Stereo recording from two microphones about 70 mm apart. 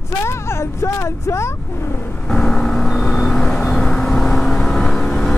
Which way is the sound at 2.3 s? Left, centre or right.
Centre.